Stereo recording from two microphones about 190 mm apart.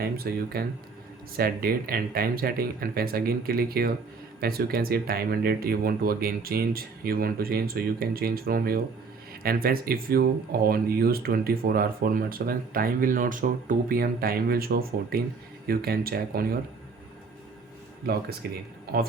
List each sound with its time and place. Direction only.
0.0 s speech: 55° right (ahead or behind)
18.0 s speech: 55° right (ahead or behind)